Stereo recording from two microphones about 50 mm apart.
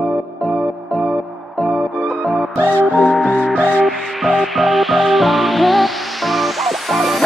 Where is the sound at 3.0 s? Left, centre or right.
Centre.